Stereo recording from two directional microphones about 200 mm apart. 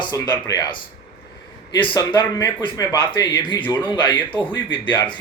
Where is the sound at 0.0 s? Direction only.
20° left (ahead or behind).